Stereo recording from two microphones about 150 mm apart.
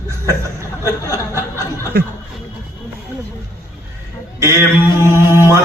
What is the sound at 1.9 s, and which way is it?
Speech, 90° right.